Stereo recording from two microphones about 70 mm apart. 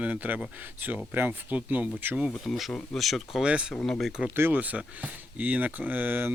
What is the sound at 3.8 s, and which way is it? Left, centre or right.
Speech, centre.